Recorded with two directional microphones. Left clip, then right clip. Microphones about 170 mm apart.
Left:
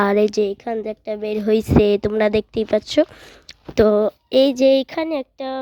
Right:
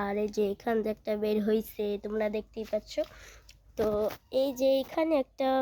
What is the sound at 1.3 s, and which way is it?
Speech, 25° left (ahead or behind).